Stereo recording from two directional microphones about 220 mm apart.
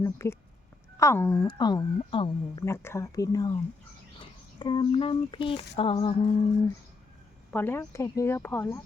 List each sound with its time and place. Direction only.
0.0 s speech: 10° left (ahead or behind)
2.6 s speech: 10° left (ahead or behind)
7.5 s speech: 10° left (ahead or behind)